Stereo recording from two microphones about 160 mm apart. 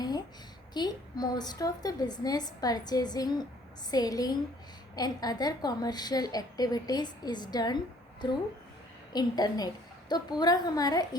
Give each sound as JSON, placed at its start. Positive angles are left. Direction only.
{"t": 0.7, "sound": "a woman's voice", "side_deg": 25}
{"t": 9.1, "sound": "a woman's voice", "side_deg": 25}